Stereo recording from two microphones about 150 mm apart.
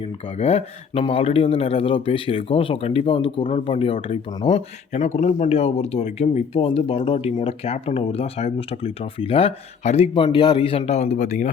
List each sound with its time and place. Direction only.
0.0 s speech: 45° left (ahead or behind)